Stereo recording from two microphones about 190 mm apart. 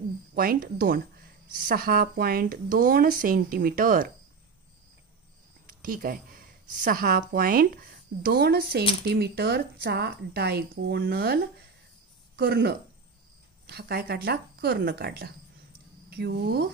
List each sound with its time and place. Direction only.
0.3 s speech: 50° right (ahead or behind)
5.7 s speech: 45° right (ahead or behind)